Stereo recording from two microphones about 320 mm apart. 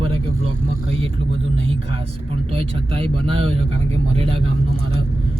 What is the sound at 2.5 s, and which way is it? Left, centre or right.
Speech, centre.